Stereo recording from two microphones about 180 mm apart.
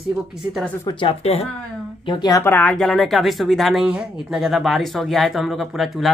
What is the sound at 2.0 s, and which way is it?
Speech, 20° left (ahead or behind).